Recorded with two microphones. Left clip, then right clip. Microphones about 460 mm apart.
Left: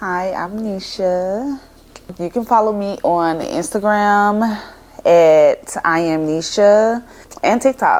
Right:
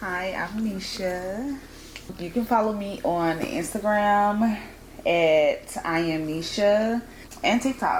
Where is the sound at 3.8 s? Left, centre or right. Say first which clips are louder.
Left 7 dB; left.